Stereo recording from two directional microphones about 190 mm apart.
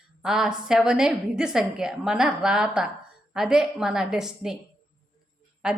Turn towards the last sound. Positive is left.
turn(degrees=-5)  # may be behind; listen again after turning